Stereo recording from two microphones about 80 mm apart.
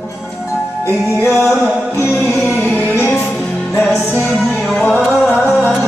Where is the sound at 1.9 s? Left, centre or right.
Left.